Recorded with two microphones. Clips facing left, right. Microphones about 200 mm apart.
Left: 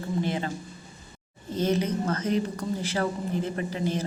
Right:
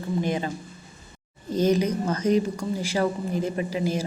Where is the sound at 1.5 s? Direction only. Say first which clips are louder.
Right 4 dB; 10° right (ahead or behind).